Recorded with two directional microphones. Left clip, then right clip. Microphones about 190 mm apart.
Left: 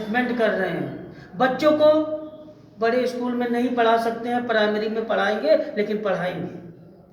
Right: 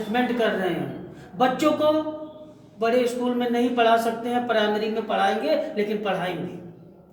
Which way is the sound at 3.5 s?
15° right (ahead or behind).